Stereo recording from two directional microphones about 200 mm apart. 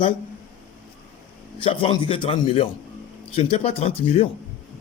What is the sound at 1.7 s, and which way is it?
A man's voice, 25° left (ahead or behind).